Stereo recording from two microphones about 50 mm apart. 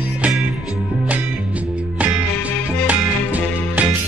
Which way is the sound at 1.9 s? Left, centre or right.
Right.